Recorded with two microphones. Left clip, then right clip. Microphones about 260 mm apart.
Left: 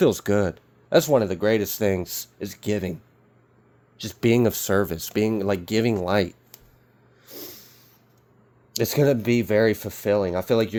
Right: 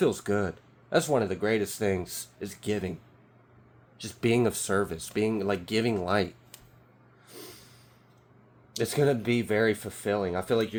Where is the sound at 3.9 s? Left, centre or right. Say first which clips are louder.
Left 5 dB; left.